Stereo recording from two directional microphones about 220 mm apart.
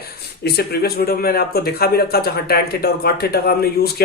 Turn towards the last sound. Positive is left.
turn(degrees=45)  # may be behind; listen again after turning